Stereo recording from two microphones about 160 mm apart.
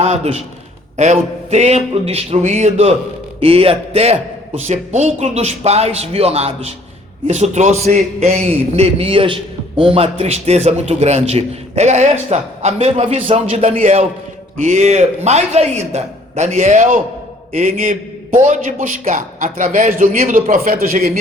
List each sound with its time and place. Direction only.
0.0 s a man's voice: 45° right (ahead or behind); by 21.1 s 60° right (ahead or behind)